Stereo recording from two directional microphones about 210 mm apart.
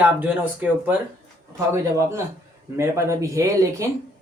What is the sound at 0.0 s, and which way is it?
Speech, 10° right (ahead or behind).